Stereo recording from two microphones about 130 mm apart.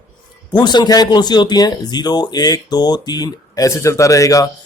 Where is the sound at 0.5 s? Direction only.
35° left (ahead or behind).